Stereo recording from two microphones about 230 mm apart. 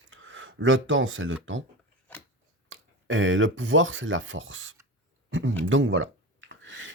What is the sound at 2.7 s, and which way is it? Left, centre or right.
Speech, right.